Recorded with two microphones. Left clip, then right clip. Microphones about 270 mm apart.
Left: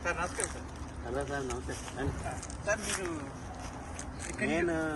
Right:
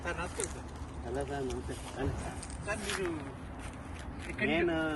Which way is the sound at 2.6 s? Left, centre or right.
Centre.